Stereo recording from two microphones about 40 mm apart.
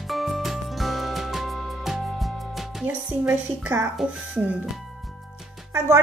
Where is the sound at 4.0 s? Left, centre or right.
Centre.